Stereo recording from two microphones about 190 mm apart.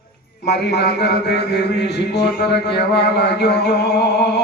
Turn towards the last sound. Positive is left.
turn(degrees=60)  # may be behind; listen again after turning